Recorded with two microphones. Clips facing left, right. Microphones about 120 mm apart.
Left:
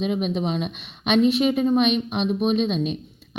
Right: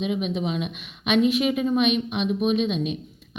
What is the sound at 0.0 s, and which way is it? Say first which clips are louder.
A woman's voice: left 2 dB; 40° left (ahead or behind).